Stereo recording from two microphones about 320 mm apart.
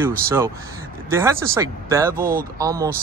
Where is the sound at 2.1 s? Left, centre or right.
Right.